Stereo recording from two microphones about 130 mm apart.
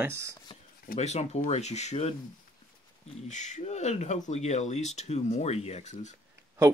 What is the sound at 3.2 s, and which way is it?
Speech, 65° left (ahead or behind).